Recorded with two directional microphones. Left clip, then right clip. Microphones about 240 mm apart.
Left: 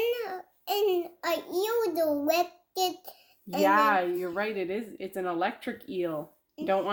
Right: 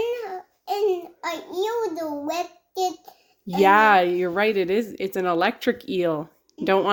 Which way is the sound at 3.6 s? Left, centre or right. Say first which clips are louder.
Right 8 dB; right.